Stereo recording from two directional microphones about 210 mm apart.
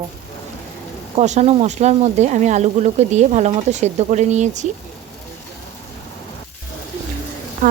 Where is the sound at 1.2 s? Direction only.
30° right (ahead or behind).